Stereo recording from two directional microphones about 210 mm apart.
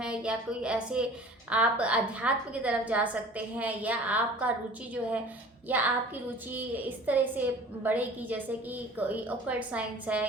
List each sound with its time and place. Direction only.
0.0 s a woman's voice: 5° right (ahead or behind)
5.7 s a woman's voice: 10° right (ahead or behind)